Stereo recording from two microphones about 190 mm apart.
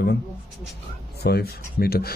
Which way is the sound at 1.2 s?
55° left (ahead or behind).